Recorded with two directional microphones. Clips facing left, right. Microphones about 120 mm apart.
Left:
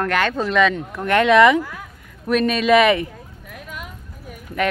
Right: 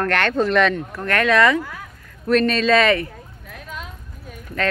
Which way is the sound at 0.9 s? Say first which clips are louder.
Left 7 dB; 20° left (ahead or behind).